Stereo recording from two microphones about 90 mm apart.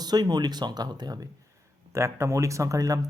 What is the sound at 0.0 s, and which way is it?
Speech, 50° right (ahead or behind).